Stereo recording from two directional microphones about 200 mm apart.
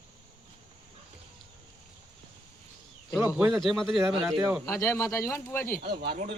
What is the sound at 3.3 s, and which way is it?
A man's voice, 5° right (ahead or behind).